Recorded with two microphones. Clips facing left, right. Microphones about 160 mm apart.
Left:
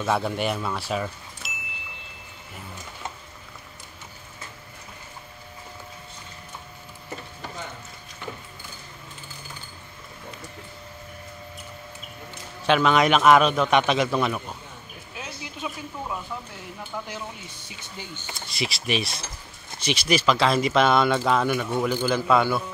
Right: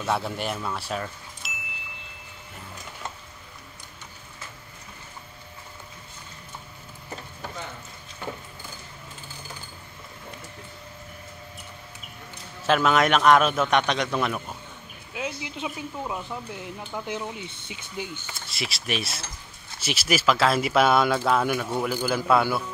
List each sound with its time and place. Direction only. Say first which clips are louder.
0.0 s speech: left 3 dB; centre (ahead or behind)
12.6 s a man's voice: left 1 dB; centre (ahead or behind)
15.1 s a sound: right 5 dB; 20° right (ahead or behind)
17.1 s speech: right 4 dB; 20° right (ahead or behind)
18.3 s a man's voice: left 4 dB; centre (ahead or behind)